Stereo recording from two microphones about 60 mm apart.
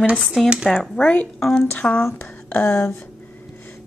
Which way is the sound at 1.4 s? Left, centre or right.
Centre.